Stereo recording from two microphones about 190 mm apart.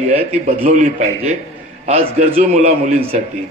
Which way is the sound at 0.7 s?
40° right (ahead or behind).